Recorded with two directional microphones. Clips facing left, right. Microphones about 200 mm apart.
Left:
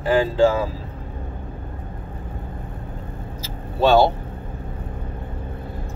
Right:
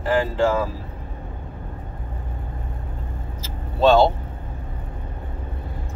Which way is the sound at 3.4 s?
10° left (ahead or behind).